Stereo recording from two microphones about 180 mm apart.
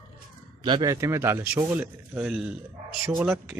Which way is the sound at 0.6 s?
25° right (ahead or behind).